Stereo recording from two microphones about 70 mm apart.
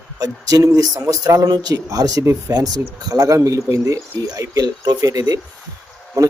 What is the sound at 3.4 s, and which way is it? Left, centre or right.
Speech, right.